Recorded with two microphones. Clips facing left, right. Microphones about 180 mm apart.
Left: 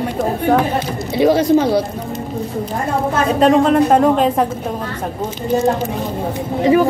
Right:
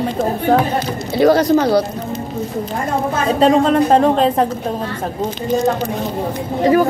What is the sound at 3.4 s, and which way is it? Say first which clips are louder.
A woman's voice: left 1 dB; 5° left (ahead or behind).